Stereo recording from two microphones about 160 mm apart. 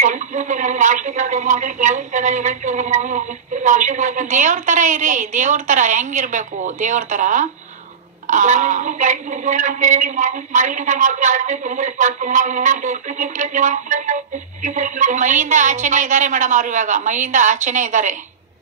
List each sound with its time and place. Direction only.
0.0 s speech: 50° right (ahead or behind)